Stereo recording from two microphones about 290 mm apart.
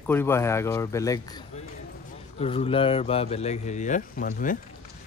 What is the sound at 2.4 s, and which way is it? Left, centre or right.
Speech, centre.